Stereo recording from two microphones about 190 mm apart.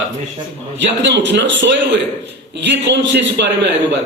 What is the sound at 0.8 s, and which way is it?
Speech, 70° right (ahead or behind).